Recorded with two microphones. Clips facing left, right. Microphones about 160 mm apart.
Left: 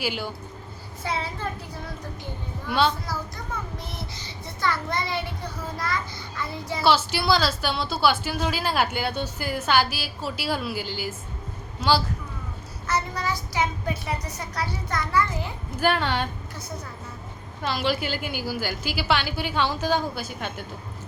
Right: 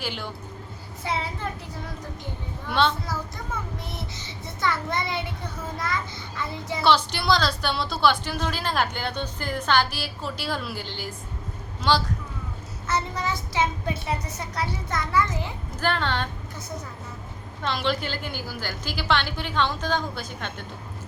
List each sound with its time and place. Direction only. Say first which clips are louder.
0.0 s a woman's voice: left 3 dB; 5° left (ahead or behind)
1.0 s a child's voice: even; 20° right (ahead or behind)
2.6 s a woman's voice: even; 5° left (ahead or behind)
3.9 s a child's voice: even; 20° right (ahead or behind)
6.8 s a woman's voice: even; 5° left (ahead or behind)
12.9 s a child's voice: even; 25° right (ahead or behind)
15.8 s a woman's voice: left 2 dB; 10° left (ahead or behind)
17.6 s a woman's voice: left 1 dB; 5° left (ahead or behind)